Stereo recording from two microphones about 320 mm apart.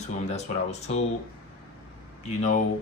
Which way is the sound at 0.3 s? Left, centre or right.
Left.